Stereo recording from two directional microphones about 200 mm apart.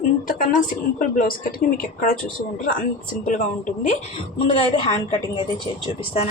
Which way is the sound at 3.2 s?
40° left (ahead or behind).